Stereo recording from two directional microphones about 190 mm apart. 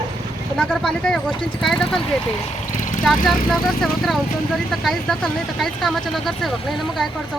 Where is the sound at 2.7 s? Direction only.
40° left (ahead or behind).